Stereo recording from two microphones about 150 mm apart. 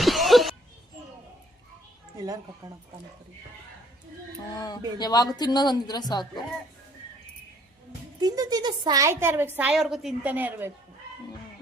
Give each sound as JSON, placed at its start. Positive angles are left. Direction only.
{"t": 0.0, "sound": "a sound", "side_deg": 0}
{"t": 2.2, "sound": "a woman's voice", "side_deg": -25}
{"t": 4.5, "sound": "speech", "side_deg": 25}
{"t": 8.2, "sound": "a woman's voice", "side_deg": -25}